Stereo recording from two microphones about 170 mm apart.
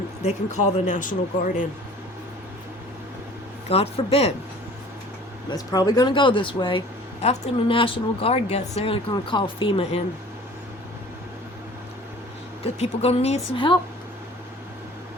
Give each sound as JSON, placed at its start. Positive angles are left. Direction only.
{"t": 0.2, "sound": "speech", "side_deg": 45}
{"t": 3.7, "sound": "speech", "side_deg": 35}
{"t": 5.5, "sound": "speech", "side_deg": 20}
{"t": 12.6, "sound": "speech", "side_deg": 35}